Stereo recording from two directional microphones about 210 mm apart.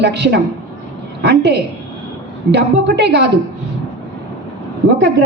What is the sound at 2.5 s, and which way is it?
Speech, 55° right (ahead or behind).